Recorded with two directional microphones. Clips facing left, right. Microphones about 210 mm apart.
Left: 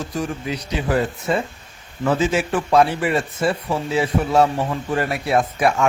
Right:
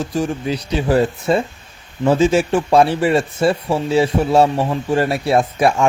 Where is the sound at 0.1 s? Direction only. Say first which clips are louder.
Right 5 dB; 30° right (ahead or behind).